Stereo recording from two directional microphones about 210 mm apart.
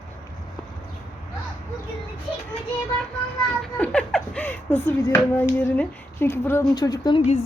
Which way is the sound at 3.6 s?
5° left (ahead or behind).